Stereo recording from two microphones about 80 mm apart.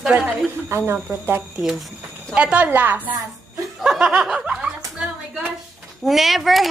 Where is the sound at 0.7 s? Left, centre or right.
Right.